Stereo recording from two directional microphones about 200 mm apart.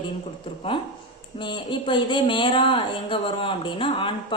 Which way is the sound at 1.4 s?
25° left (ahead or behind).